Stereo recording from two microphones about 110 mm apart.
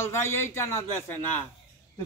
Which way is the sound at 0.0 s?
20° left (ahead or behind).